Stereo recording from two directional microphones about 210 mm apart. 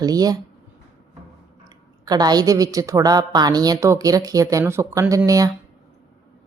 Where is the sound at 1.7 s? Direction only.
20° right (ahead or behind).